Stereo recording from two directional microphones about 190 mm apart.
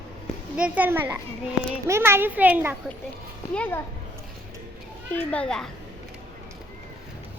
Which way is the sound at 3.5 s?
10° left (ahead or behind).